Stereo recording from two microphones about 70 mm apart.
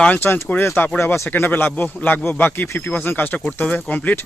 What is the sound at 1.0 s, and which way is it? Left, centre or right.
Speech, left.